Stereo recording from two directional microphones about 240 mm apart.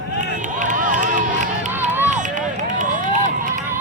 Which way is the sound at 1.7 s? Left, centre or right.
Centre.